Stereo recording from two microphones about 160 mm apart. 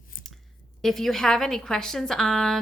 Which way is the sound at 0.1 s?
60° left (ahead or behind).